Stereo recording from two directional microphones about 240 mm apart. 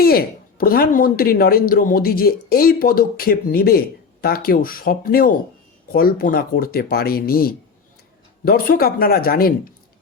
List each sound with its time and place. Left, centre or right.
0.0 s speech: left